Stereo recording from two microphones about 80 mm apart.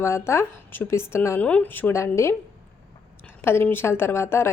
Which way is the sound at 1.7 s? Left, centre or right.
Left.